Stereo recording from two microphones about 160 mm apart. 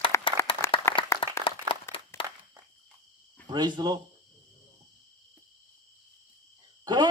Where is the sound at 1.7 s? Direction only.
25° right (ahead or behind).